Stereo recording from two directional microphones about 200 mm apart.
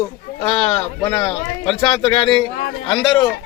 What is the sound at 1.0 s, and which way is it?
A man's voice, 15° left (ahead or behind).